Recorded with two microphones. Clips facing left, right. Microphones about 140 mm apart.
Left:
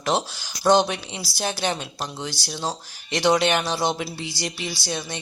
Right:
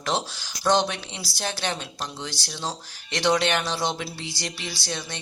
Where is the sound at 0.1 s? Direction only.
5° left (ahead or behind).